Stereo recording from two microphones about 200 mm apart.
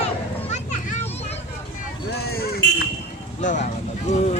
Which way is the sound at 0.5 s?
35° left (ahead or behind).